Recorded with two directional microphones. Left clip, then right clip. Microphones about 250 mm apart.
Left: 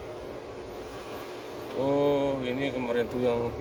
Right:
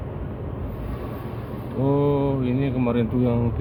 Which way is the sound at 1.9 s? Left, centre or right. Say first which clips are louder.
Right 3 dB; centre.